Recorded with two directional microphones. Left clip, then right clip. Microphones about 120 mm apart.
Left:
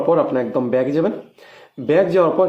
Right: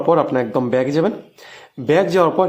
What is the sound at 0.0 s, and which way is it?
Speech, 35° right (ahead or behind).